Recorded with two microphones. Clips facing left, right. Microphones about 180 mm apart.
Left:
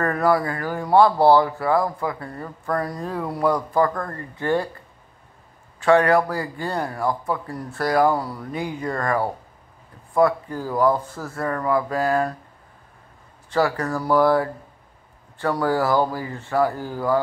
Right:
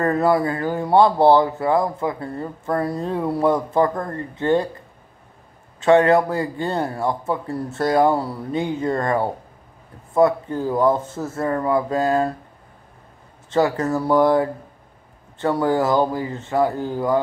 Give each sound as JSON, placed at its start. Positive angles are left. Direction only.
{"t": 0.0, "sound": "speech", "side_deg": -25}
{"t": 5.8, "sound": "speech", "side_deg": -20}
{"t": 13.5, "sound": "speech", "side_deg": -20}